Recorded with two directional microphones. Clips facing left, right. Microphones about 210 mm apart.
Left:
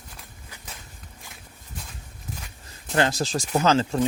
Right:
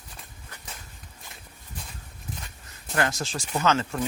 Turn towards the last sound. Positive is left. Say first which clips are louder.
# left 4 dB
turn(degrees=30)  # may be behind; listen again after turning